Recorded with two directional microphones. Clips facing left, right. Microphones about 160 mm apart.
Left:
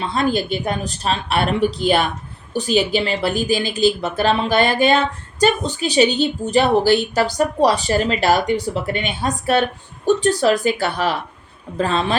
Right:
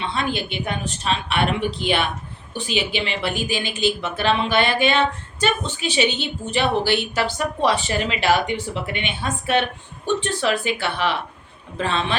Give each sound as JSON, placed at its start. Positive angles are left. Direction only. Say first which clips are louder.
{"t": 0.0, "sound": "speech", "louder": "left 5 dB", "side_deg": 40}